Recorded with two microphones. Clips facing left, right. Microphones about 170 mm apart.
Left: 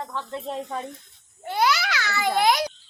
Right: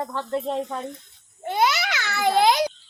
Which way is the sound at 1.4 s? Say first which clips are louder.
Right 1 dB; 20° right (ahead or behind).